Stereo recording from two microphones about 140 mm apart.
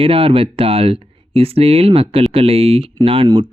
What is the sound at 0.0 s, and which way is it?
Speech, 40° right (ahead or behind).